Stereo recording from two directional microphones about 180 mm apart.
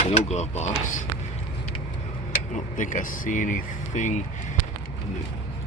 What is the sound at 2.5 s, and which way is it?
Speech, 45° left (ahead or behind).